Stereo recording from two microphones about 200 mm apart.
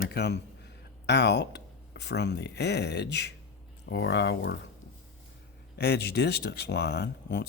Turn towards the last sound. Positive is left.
turn(degrees=60)  # may be behind; listen again after turning